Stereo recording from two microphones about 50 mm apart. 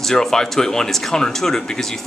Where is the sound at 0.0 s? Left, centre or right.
Centre.